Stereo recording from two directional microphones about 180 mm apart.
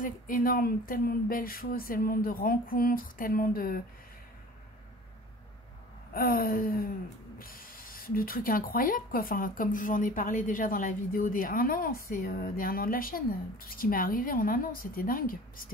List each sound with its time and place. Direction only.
0.0 s speech: 55° left (ahead or behind)
6.1 s speech: 55° left (ahead or behind)